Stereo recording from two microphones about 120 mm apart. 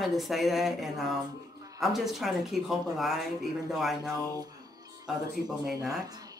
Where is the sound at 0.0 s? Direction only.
Centre (ahead or behind).